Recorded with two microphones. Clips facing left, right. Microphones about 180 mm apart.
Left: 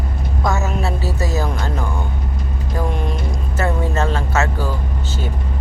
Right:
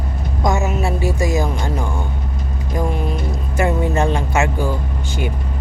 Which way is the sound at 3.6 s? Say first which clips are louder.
Right 3 dB; 15° right (ahead or behind).